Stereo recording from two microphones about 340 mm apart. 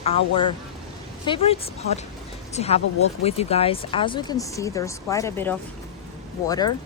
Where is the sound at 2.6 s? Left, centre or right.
Centre.